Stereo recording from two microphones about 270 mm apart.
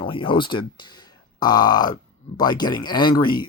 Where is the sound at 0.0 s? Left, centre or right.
Centre.